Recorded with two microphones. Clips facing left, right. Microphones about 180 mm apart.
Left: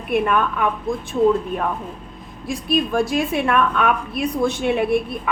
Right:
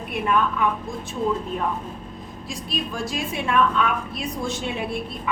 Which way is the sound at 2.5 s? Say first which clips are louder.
Left 10 dB; 60° left (ahead or behind).